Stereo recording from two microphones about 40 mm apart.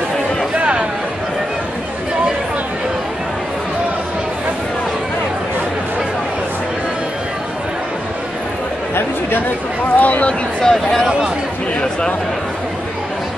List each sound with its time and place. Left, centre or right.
0.6 s chatter: right
9.9 s a sound: left
10.6 s speech: centre